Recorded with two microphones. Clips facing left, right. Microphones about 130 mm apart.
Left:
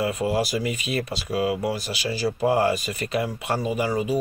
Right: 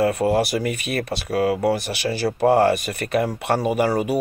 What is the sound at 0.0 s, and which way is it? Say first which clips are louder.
Speech: right 5 dB; 50° right (ahead or behind).